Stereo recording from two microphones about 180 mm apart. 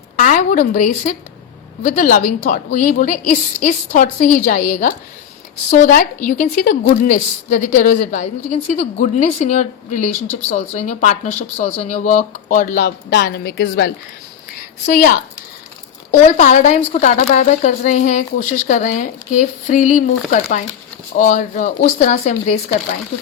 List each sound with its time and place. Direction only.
0.2 s a woman's voice: 50° left (ahead or behind); by 13.9 s 80° left
16.2 s a woman's voice: 40° left (ahead or behind)